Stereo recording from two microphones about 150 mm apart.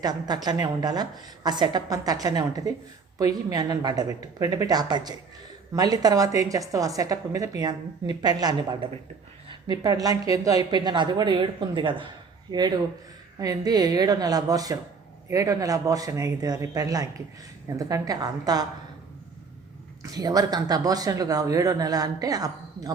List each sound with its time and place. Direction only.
0.0 s speech: 25° right (ahead or behind)
20.0 s speech: 25° right (ahead or behind)